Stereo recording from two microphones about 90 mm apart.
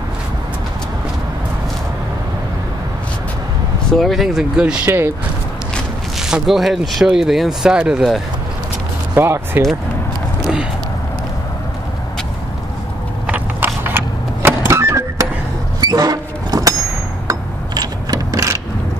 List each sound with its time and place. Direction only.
3.9 s speech: centre (ahead or behind)
4.8 s speech: 25° right (ahead or behind)
6.1 s speech: 5° right (ahead or behind)
9.1 s speech: 25° right (ahead or behind)
13.3 s vehicle: 20° right (ahead or behind)
15.8 s a sound: 45° right (ahead or behind)
17.3 s mechanisms: 45° right (ahead or behind)